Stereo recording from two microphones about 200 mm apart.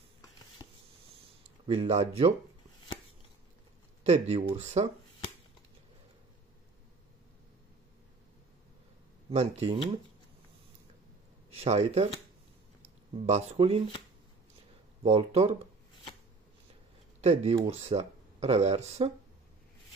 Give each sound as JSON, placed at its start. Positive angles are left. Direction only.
{"t": 0.6, "sound": "a sound", "side_deg": 20}
{"t": 1.7, "sound": "speech", "side_deg": -30}
{"t": 4.0, "sound": "speech", "side_deg": -35}
{"t": 9.3, "sound": "speech", "side_deg": -30}
{"t": 11.5, "sound": "speech", "side_deg": -30}
{"t": 13.2, "sound": "speech", "side_deg": -30}
{"t": 15.0, "sound": "speech", "side_deg": -30}
{"t": 17.2, "sound": "speech", "side_deg": -30}